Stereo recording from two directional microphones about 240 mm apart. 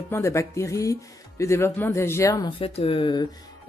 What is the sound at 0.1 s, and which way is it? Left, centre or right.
A woman's voice, centre.